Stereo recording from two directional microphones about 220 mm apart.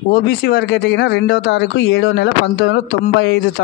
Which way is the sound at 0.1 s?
45° left (ahead or behind).